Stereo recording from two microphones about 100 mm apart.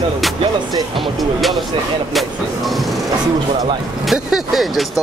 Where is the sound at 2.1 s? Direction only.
Centre (ahead or behind).